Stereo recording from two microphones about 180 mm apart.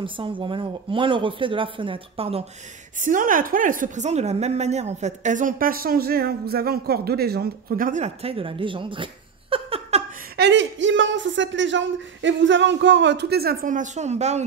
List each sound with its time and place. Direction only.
0.0 s speech: 30° right (ahead or behind)
3.0 s a woman's voice: 45° right (ahead or behind)
10.3 s speech: 75° right (ahead or behind); by 14.4 s 40° right (ahead or behind)